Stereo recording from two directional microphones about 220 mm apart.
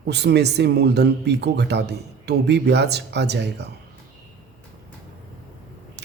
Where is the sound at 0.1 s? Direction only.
50° right (ahead or behind).